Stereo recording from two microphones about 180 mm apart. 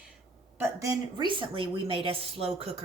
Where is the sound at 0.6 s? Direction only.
20° right (ahead or behind).